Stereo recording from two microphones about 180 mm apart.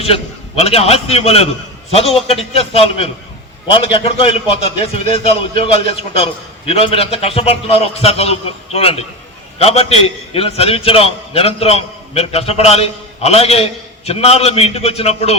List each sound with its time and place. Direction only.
0.6 s a man's voice: 35° left (ahead or behind)